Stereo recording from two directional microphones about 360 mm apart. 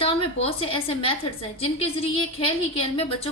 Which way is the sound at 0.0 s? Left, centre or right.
Centre.